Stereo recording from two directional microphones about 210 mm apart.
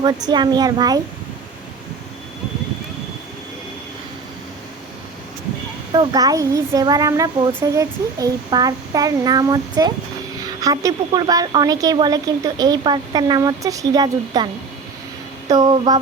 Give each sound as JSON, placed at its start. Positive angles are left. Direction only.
{"t": 0.3, "sound": "speech", "side_deg": -20}
{"t": 5.9, "sound": "speech", "side_deg": -20}